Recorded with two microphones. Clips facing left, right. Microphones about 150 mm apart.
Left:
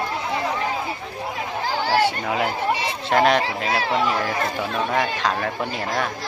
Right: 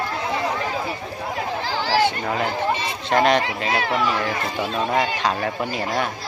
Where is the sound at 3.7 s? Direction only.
30° left (ahead or behind).